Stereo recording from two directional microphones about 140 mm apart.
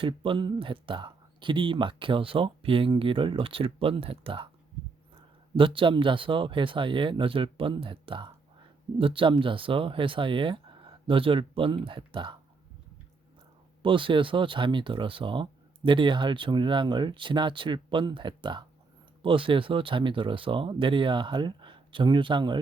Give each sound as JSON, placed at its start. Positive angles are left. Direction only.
{"t": 0.0, "sound": "speech", "side_deg": -40}
{"t": 5.5, "sound": "speech", "side_deg": -35}
{"t": 13.8, "sound": "speech", "side_deg": -35}